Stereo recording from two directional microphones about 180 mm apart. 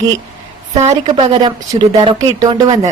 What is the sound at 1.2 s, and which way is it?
A woman's voice, 30° right (ahead or behind).